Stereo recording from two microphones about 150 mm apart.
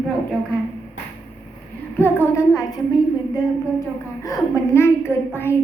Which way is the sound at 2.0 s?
15° left (ahead or behind).